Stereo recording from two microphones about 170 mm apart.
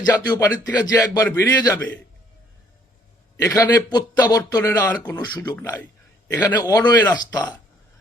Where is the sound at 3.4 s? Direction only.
20° left (ahead or behind).